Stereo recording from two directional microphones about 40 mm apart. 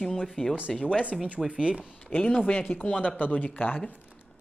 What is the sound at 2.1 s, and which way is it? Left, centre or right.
Speech, left.